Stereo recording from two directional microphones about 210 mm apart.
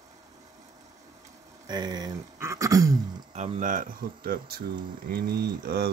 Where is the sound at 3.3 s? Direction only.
35° right (ahead or behind).